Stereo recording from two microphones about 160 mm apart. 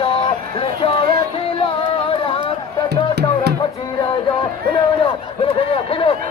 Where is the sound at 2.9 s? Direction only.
90° right.